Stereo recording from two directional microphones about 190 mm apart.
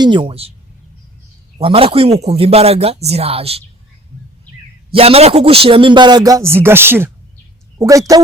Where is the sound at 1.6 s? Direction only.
30° right (ahead or behind).